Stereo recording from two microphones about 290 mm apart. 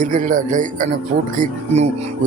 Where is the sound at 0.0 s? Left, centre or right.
Right.